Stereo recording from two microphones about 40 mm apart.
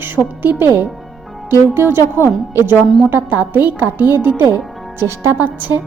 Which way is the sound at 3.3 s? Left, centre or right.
Right.